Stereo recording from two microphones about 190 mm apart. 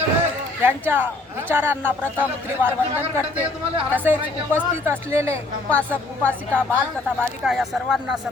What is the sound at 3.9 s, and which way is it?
Speech, 10° right (ahead or behind).